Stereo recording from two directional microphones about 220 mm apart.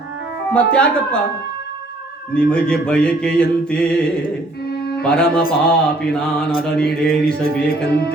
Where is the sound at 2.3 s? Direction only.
5° left (ahead or behind).